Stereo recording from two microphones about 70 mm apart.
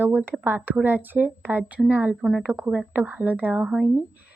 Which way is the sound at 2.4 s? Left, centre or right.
Centre.